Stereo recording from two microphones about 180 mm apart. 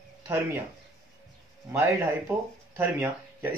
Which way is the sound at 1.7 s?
15° right (ahead or behind).